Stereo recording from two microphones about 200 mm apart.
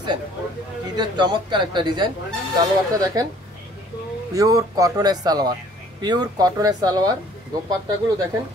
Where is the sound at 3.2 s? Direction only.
20° right (ahead or behind).